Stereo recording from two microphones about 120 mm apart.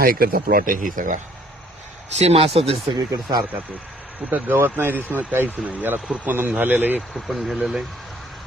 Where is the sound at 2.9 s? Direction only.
30° right (ahead or behind).